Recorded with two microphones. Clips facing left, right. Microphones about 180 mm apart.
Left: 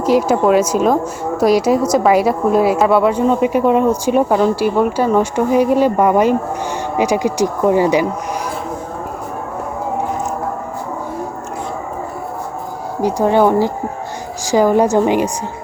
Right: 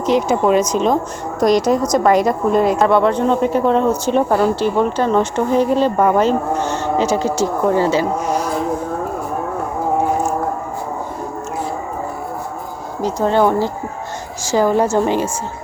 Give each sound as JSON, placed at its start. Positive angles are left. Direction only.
{"t": 0.0, "sound": "a woman's voice", "side_deg": 5}
{"t": 13.0, "sound": "a woman's voice", "side_deg": 15}